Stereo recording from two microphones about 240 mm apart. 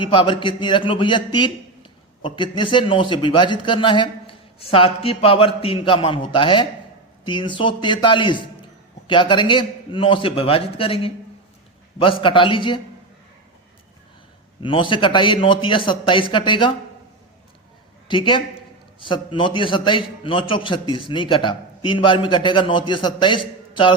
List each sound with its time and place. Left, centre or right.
0.0 s a man's voice: left
14.6 s a man's voice: left
18.1 s a man's voice: left